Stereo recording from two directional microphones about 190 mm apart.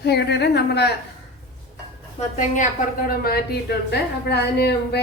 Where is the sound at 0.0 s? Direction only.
60° left (ahead or behind).